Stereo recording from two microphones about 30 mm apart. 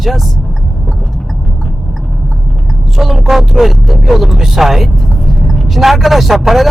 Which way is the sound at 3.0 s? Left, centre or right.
Centre.